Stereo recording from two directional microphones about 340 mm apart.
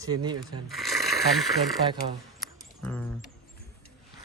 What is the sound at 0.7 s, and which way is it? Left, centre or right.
Speech, centre.